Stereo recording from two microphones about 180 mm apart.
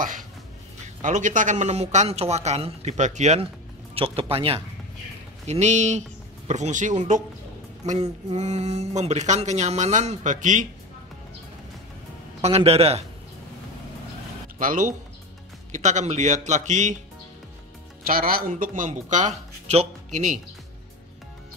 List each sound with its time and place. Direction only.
1.0 s speech: 45° right (ahead or behind)
12.4 s speech: 35° right (ahead or behind)
14.6 s speech: 45° right (ahead or behind)
18.0 s speech: 55° right (ahead or behind)